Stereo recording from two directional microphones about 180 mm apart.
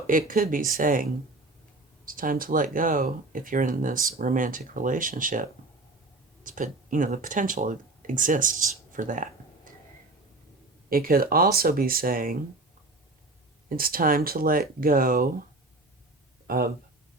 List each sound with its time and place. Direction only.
0.1 s speech: 50° right (ahead or behind)
2.0 s speech: 50° right (ahead or behind)
10.8 s speech: 55° right (ahead or behind)
13.7 s speech: 55° right (ahead or behind)
16.5 s speech: 55° right (ahead or behind)